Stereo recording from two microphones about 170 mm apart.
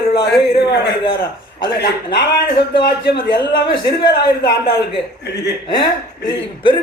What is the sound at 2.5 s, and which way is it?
Speech, 80° left.